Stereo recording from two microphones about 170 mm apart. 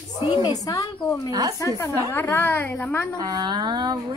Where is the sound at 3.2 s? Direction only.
25° right (ahead or behind).